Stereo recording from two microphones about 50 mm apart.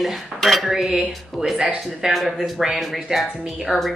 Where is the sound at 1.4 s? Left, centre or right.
Right.